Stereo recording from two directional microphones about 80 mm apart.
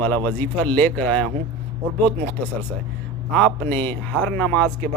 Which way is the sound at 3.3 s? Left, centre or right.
Centre.